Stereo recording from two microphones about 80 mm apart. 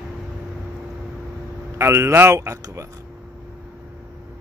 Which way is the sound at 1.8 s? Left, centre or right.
Right.